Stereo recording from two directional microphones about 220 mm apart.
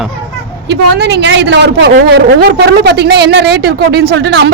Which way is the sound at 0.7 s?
50° right (ahead or behind).